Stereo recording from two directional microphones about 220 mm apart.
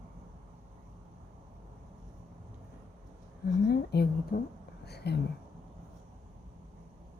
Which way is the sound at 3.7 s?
45° left (ahead or behind).